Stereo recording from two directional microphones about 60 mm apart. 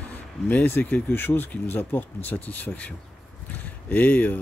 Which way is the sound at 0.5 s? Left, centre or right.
Left.